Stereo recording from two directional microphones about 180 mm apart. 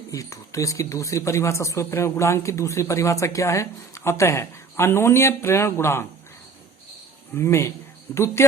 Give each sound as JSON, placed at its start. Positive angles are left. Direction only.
{"t": 0.1, "sound": "speech", "side_deg": 20}
{"t": 7.3, "sound": "speech", "side_deg": 15}